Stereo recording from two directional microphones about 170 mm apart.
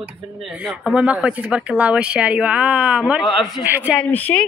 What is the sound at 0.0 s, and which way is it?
Speech, 5° right (ahead or behind).